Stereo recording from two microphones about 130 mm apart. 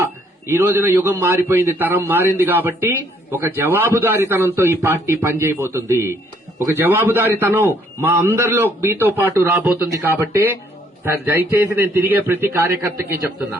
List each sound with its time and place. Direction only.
0.0 s a man's voice: 20° right (ahead or behind)